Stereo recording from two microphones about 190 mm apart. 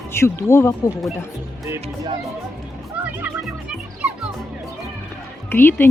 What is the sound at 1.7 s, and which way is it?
Music, 15° right (ahead or behind).